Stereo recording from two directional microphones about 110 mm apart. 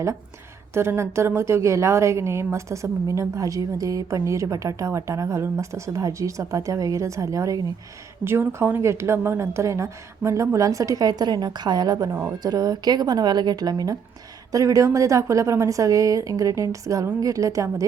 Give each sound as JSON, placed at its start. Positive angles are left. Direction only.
{"t": 0.7, "sound": "a woman's voice", "side_deg": -25}